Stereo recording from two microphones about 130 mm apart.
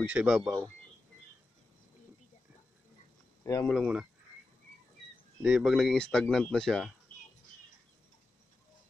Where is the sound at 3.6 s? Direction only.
Centre (ahead or behind).